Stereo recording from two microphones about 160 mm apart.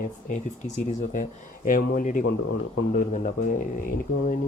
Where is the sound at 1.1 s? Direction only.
55° left (ahead or behind).